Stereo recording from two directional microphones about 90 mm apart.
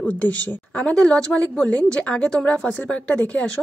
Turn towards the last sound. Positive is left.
turn(degrees=15)  # may be behind; listen again after turning